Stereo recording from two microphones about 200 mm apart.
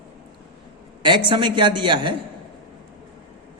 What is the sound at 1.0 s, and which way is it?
A man's voice, 25° right (ahead or behind).